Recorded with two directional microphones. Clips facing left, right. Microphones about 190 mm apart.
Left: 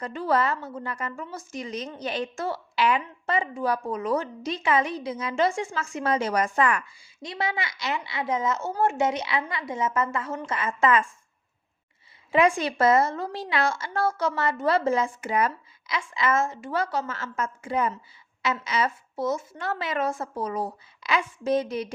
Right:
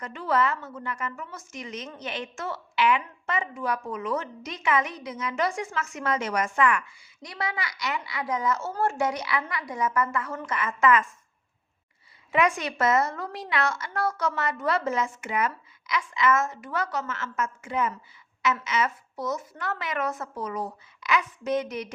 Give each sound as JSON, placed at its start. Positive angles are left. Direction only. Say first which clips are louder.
{"t": 0.0, "sound": "a woman's voice", "louder": "left 1 dB", "side_deg": 35}
{"t": 12.3, "sound": "a woman's voice", "louder": "left 3 dB", "side_deg": 30}